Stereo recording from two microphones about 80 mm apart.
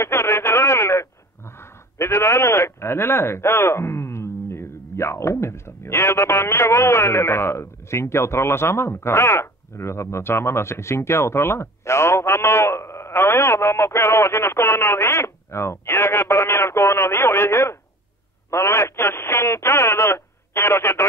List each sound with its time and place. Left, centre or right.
0.0 s radio: left
1.6 s speech: left
18.5 s radio: left